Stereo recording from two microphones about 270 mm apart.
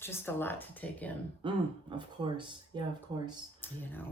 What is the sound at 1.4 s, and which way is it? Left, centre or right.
Speech, centre.